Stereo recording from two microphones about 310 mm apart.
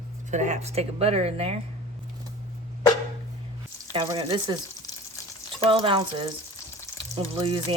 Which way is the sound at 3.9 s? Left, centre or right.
Centre.